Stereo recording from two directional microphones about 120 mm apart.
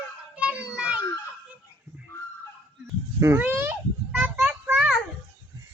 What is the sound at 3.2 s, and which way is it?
Children playing, 20° right (ahead or behind).